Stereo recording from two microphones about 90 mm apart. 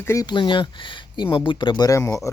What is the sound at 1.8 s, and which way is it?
Speech, 35° left (ahead or behind).